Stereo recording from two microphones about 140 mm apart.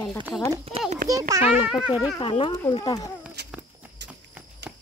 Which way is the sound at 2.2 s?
35° left (ahead or behind).